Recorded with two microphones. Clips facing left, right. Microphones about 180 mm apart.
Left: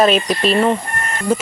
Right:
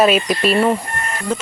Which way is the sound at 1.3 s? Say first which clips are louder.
Left 4 dB; 10° left (ahead or behind).